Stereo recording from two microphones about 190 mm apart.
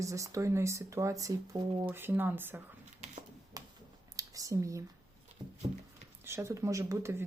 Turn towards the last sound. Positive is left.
turn(degrees=-15)  # may be behind; listen again after turning